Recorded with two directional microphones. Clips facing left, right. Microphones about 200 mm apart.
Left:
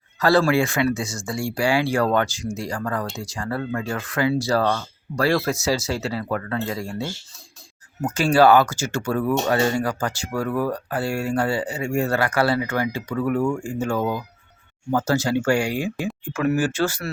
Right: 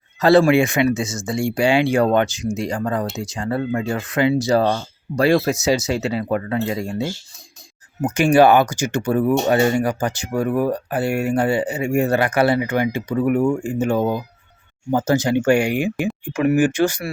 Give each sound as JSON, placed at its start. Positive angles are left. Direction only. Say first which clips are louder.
{"t": 0.2, "sound": "speech", "louder": "right 5 dB", "side_deg": -20}